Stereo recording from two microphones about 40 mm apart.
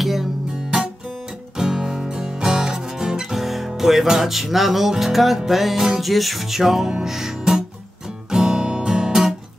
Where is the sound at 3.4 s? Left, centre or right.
Centre.